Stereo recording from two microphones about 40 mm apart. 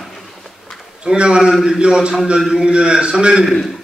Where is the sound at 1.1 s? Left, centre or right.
Right.